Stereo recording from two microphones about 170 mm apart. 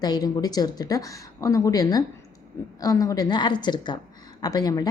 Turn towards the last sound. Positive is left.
turn(degrees=20)  # may be behind; listen again after turning